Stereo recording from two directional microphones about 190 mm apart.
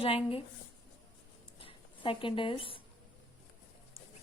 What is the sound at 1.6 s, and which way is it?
Speech, 25° left (ahead or behind).